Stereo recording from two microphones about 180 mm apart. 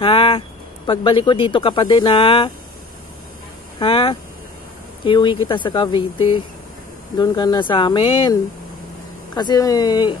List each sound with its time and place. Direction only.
0.0 s speech: 30° left (ahead or behind)
3.8 s speech: 30° left (ahead or behind)